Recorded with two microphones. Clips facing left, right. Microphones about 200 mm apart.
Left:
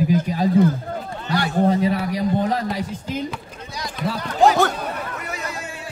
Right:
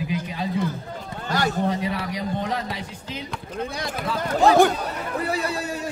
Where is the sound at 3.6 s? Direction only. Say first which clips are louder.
Right 4 dB; 55° right (ahead or behind).